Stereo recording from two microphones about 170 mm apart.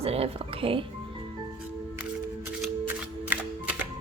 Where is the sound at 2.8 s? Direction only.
10° right (ahead or behind).